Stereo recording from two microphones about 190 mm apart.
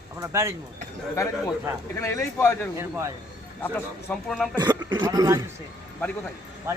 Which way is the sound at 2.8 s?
15° right (ahead or behind).